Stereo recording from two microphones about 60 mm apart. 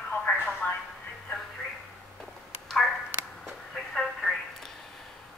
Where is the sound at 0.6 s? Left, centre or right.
Left.